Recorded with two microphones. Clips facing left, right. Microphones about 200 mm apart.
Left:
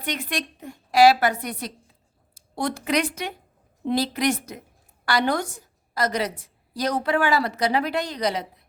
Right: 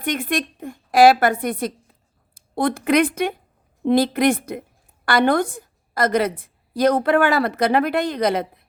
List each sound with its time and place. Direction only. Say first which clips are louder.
0.0 s a woman's voice: right 6 dB; 50° right (ahead or behind)